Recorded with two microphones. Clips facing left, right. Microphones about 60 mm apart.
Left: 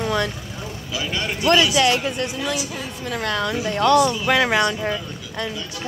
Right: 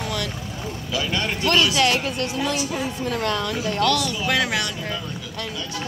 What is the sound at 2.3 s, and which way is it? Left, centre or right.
A woman's voice, centre.